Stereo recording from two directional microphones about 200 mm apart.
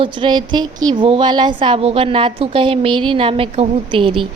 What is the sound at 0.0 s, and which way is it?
A woman's voice, 25° right (ahead or behind).